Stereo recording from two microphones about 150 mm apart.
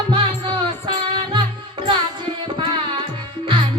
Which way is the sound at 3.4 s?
35° right (ahead or behind).